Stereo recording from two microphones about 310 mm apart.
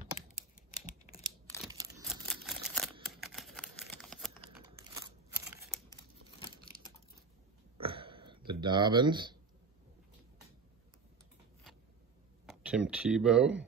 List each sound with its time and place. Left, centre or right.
0.8 s computer keyboard: left
1.7 s a sound: centre
2.2 s camera: centre
3.2 s computer keyboard: centre
7.8 s a sound: centre
8.5 s speech: centre
12.4 s speech: centre